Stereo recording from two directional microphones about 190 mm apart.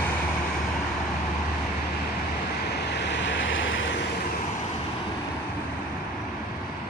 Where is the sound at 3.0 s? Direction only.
70° left (ahead or behind); by 4.0 s 85° left.